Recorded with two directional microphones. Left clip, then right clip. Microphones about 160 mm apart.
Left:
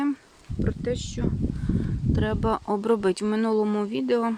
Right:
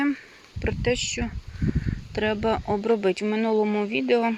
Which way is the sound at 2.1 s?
20° left (ahead or behind).